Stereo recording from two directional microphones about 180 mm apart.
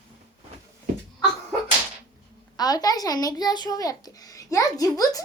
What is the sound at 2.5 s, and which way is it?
A child's voice, 20° left (ahead or behind).